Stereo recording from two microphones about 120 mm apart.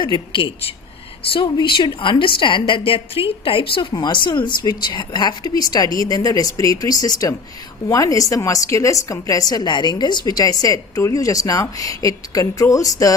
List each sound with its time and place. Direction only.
0.0 s a woman's voice: 40° left (ahead or behind)